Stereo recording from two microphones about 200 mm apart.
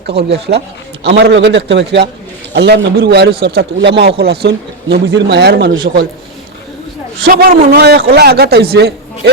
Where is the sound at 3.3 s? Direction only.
25° right (ahead or behind).